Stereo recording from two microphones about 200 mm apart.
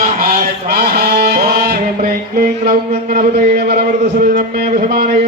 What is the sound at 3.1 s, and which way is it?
Speech, 55° right (ahead or behind).